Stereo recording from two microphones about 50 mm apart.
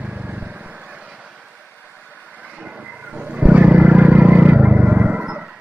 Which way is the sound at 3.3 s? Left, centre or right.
Right.